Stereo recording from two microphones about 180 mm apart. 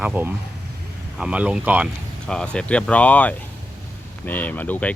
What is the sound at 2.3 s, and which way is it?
Speech, 5° left (ahead or behind).